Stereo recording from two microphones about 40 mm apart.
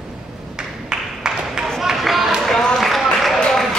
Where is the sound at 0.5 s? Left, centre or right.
Centre.